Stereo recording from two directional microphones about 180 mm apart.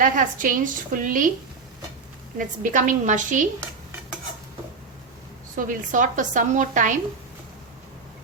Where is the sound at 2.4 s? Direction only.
45° right (ahead or behind).